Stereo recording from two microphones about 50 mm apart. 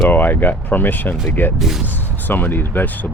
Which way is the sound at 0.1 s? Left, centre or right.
Left.